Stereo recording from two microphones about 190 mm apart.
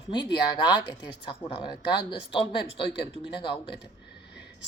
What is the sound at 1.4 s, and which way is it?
A woman's voice, 30° left (ahead or behind).